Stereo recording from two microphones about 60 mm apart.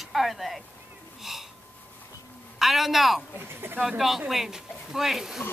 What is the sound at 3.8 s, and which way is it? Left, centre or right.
Speech, centre.